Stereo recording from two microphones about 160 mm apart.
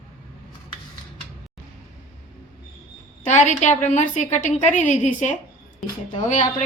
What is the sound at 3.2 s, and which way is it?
A woman's voice, 50° left (ahead or behind).